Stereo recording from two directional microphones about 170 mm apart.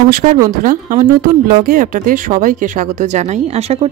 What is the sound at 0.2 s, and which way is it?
Speech, 40° right (ahead or behind).